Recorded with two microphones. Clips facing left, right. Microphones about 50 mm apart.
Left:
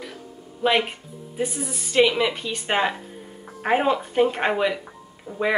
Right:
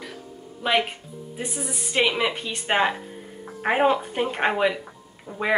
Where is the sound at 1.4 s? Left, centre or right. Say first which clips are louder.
Left 5 dB; centre.